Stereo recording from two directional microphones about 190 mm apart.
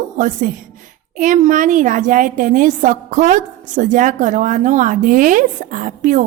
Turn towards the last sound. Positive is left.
turn(degrees=-40)  # may be behind; listen again after turning